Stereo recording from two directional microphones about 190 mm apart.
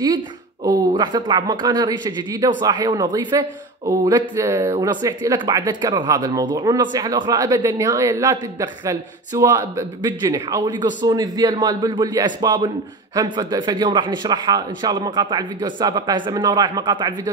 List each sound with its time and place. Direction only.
0.7 s speech: 25° right (ahead or behind)